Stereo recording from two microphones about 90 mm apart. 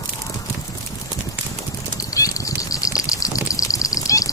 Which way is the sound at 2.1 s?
40° left (ahead or behind).